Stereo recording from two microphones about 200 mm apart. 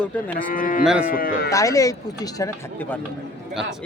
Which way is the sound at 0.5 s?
45° left (ahead or behind).